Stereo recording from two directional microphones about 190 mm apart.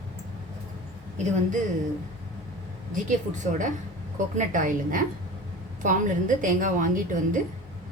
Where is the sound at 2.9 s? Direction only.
40° right (ahead or behind).